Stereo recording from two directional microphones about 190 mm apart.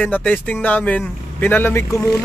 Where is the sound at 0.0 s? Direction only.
10° left (ahead or behind).